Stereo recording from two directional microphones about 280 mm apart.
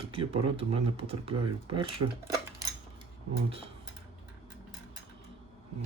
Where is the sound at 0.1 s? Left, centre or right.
Centre.